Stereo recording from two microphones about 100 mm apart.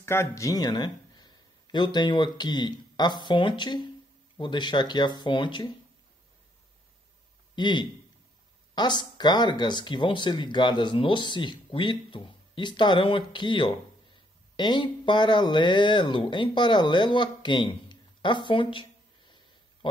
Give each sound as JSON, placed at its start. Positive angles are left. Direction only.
{"t": 0.0, "sound": "speech", "side_deg": 25}
{"t": 7.5, "sound": "speech", "side_deg": 50}